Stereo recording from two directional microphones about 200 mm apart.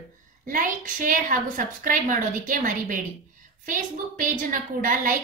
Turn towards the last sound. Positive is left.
turn(degrees=-45)  # may be behind; listen again after turning